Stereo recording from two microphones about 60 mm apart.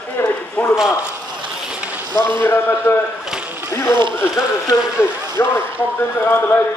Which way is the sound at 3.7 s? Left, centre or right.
Left.